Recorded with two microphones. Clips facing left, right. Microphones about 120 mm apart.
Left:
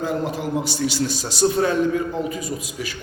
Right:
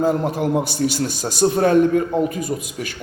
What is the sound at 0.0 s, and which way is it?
A man's voice, 50° right (ahead or behind).